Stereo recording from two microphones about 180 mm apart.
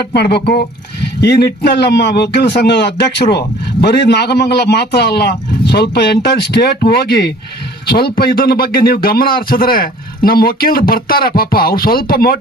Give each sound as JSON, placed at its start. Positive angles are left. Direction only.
{"t": 0.1, "sound": "a man's voice", "side_deg": 65}